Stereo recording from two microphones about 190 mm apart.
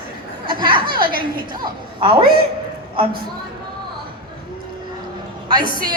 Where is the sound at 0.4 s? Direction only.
25° right (ahead or behind).